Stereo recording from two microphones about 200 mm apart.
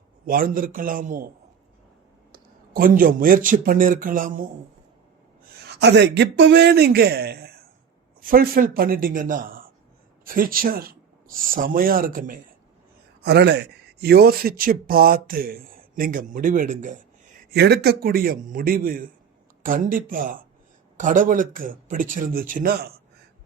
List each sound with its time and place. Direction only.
0.3 s speech: 45° right (ahead or behind)
2.3 s speech: 45° right (ahead or behind)
5.6 s speech: 55° right (ahead or behind)
13.2 s speech: 55° right (ahead or behind); by 17.0 s 40° right (ahead or behind)
17.5 s speech: 55° right (ahead or behind)